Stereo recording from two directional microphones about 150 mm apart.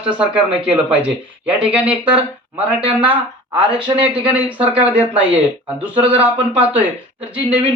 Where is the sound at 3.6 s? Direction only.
35° right (ahead or behind).